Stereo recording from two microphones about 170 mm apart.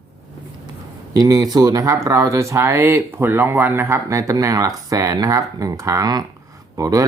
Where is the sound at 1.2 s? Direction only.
20° right (ahead or behind).